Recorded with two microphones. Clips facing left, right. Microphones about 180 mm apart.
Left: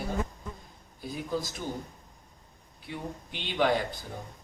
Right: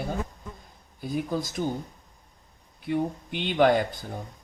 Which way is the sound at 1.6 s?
50° right (ahead or behind).